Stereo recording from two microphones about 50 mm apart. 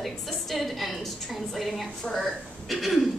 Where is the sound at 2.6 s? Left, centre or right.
Centre.